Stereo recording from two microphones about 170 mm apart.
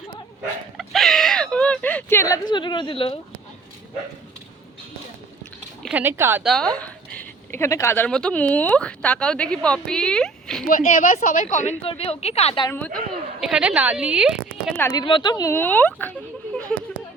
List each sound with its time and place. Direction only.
0.8 s a sound: centre (ahead or behind); by 3.2 s 30° left (ahead or behind)
5.9 s a woman's voice: 10° right (ahead or behind)
6.4 s speech: centre (ahead or behind)
10.7 s a woman's voice: 50° left (ahead or behind)
11.8 s a woman's voice: 35° left (ahead or behind)
12.7 s speech: 10° left (ahead or behind)
13.4 s a woman's voice: 5° right (ahead or behind)
14.8 s speech: 15° left (ahead or behind)
15.0 s speech: 25° left (ahead or behind)
15.5 s speech: 10° left (ahead or behind)